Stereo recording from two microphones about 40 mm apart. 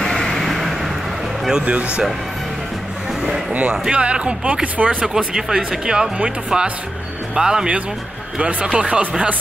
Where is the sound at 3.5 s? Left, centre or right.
Right.